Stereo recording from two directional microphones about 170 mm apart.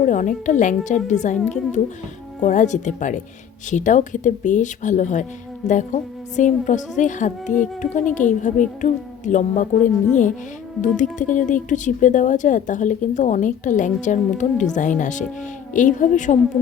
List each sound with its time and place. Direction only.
0.0 s speech: 50° left (ahead or behind)
2.4 s speech: 45° left (ahead or behind)